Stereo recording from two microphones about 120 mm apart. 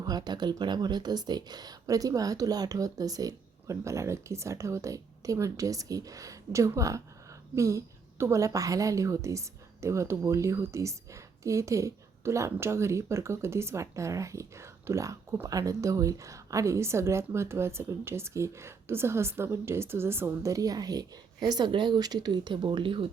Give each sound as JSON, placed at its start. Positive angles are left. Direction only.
{"t": 0.0, "sound": "a woman's voice", "side_deg": -35}